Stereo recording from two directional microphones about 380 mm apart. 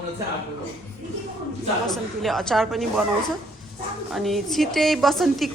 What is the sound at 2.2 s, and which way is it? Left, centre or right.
Speech, centre.